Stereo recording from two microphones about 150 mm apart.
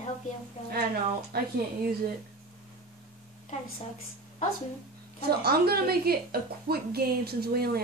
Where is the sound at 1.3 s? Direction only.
90° right.